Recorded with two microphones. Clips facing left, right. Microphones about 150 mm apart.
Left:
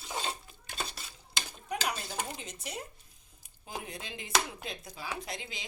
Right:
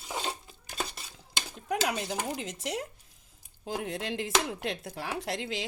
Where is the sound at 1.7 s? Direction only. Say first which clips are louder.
Right 6 dB; 90° right.